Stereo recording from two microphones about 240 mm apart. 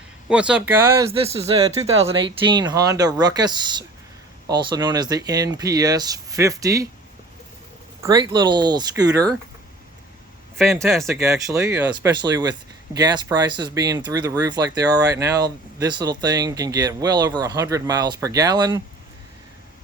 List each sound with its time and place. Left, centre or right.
0.3 s speech: centre
1.1 s speech: right
8.0 s speech: centre
10.8 s speech: centre
11.2 s speech: centre